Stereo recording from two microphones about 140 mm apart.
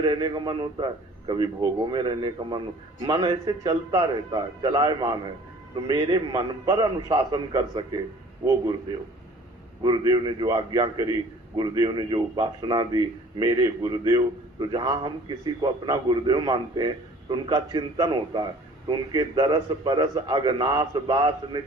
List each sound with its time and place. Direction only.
0.0 s a man's voice: 30° right (ahead or behind)
9.8 s a man's voice: 30° right (ahead or behind)